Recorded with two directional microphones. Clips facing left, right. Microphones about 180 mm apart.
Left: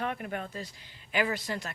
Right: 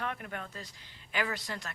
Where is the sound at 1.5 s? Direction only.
10° left (ahead or behind).